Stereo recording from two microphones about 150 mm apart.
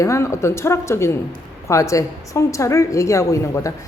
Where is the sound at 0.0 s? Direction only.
20° left (ahead or behind).